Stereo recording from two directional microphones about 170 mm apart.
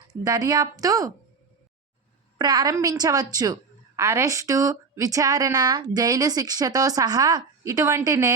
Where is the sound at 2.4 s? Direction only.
25° right (ahead or behind).